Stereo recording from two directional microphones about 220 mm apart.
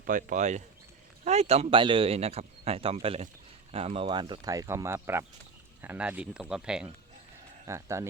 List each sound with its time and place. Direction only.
0.0 s speech: 40° right (ahead or behind); by 8.0 s 15° right (ahead or behind)